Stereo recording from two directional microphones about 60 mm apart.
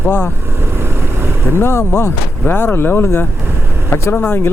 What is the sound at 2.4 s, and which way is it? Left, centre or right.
Speech, left.